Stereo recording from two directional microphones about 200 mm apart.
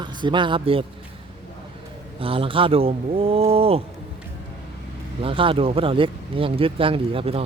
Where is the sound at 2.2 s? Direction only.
25° right (ahead or behind).